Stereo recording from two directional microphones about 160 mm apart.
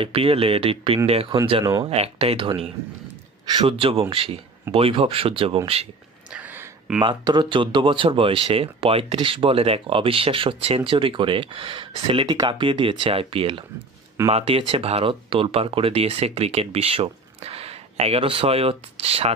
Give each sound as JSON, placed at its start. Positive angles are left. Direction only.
{"t": 0.0, "sound": "speech", "side_deg": -35}
{"t": 6.3, "sound": "a sound", "side_deg": -10}
{"t": 7.0, "sound": "speech", "side_deg": -30}